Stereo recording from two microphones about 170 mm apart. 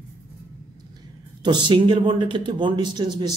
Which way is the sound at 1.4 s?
25° right (ahead or behind).